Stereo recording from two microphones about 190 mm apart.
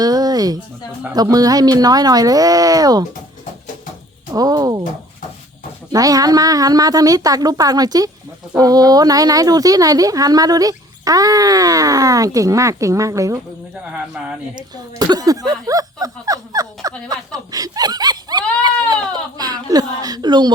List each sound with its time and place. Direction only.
0.0 s a sound: 20° right (ahead or behind)
1.1 s speech: 20° right (ahead or behind)
4.4 s speech: 20° right (ahead or behind)
5.9 s speech: 20° right (ahead or behind)
13.9 s speech: 5° right (ahead or behind)
14.5 s speech: 20° right (ahead or behind)
17.1 s a sound: 20° right (ahead or behind)
19.4 s speech: 20° right (ahead or behind)